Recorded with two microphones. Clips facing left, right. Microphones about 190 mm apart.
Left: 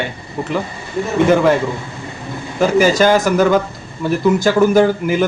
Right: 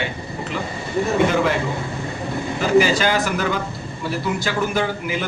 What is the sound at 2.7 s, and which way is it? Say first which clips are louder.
A man's voice: left 4 dB; 45° left (ahead or behind).